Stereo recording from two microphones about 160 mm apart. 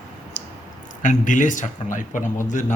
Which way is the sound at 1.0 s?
50° left (ahead or behind).